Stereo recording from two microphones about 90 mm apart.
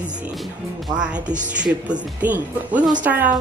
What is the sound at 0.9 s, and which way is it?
A woman's voice, 10° right (ahead or behind).